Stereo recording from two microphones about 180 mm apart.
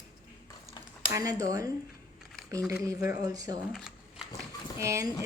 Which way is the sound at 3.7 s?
Centre (ahead or behind).